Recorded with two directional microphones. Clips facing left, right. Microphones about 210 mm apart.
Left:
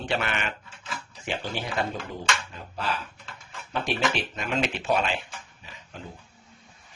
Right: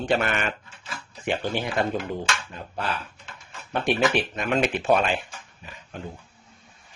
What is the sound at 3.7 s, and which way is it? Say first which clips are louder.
Speech: right 5 dB; 55° right (ahead or behind).